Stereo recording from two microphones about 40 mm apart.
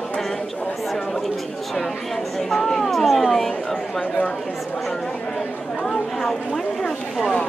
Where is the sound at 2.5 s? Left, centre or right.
Centre.